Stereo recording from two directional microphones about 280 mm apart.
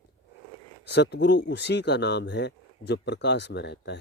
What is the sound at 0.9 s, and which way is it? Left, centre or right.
Speech, left.